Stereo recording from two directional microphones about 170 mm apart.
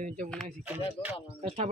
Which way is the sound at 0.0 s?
45° right (ahead or behind).